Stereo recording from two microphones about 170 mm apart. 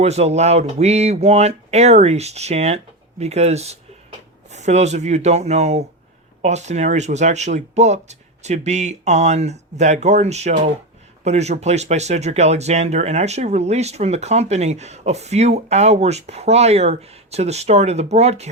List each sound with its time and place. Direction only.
0.0 s speech: 40° right (ahead or behind)